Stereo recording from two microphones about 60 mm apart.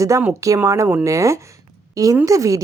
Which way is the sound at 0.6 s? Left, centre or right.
Right.